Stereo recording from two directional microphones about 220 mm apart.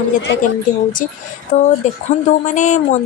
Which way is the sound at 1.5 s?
35° left (ahead or behind).